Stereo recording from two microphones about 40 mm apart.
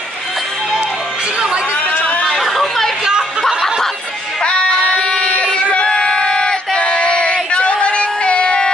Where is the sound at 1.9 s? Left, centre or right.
Left.